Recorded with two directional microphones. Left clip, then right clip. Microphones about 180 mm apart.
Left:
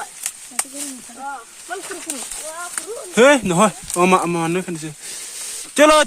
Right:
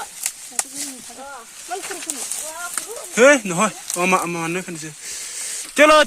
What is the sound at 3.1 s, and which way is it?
Speech, 40° left (ahead or behind).